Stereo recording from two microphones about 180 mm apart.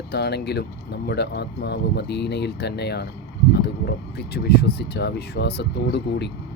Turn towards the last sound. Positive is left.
turn(degrees=70)  # may be behind; listen again after turning